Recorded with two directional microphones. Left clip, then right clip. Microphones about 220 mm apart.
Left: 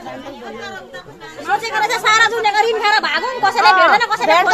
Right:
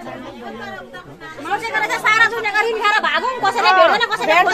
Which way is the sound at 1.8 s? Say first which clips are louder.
Left 1 dB; 30° left (ahead or behind).